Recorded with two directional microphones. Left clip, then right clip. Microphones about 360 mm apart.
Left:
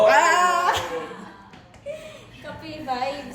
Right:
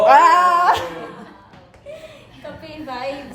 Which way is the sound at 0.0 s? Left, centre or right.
Centre.